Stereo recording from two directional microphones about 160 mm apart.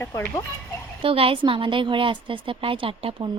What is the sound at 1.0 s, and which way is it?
A woman's voice, 35° right (ahead or behind).